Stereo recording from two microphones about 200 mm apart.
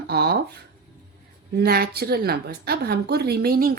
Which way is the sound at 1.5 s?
50° right (ahead or behind).